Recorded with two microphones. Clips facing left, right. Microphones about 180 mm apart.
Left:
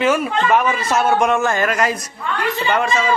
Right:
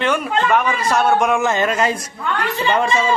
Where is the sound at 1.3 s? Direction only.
20° right (ahead or behind).